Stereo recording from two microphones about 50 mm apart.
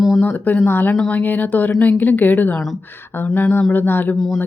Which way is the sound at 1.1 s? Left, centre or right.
Left.